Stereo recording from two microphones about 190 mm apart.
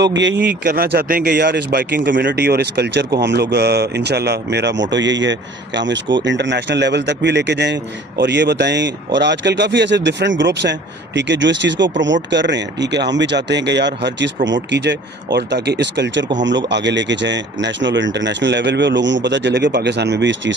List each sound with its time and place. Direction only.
0.0 s speech: 70° right (ahead or behind)
0.6 s speech: 55° right (ahead or behind); by 20.5 s 70° right (ahead or behind)